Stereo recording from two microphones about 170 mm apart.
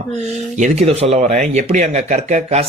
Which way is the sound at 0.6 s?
40° right (ahead or behind).